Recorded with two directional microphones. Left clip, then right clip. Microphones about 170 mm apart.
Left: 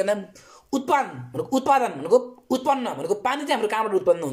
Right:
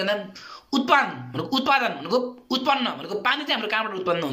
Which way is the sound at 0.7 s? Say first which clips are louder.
Right 2 dB; 35° left (ahead or behind).